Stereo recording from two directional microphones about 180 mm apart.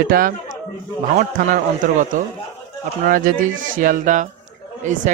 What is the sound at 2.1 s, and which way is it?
Speech, 45° right (ahead or behind).